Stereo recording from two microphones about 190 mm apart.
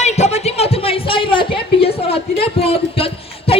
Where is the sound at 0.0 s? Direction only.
35° left (ahead or behind).